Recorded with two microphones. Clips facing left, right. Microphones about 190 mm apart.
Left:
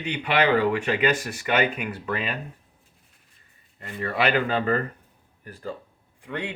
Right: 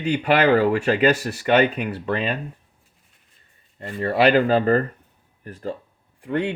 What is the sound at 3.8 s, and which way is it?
Speech, 30° right (ahead or behind).